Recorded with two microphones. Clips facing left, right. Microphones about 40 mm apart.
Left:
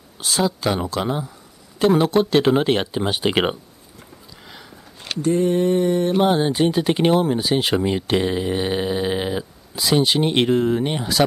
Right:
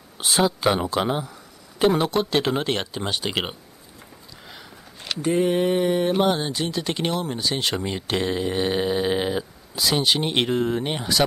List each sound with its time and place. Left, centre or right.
0.2 s mantra: right
0.7 s speech: centre
2.0 s speech: centre
5.2 s mantra: right
6.1 s speech: centre
6.5 s speech: left; by 11.2 s centre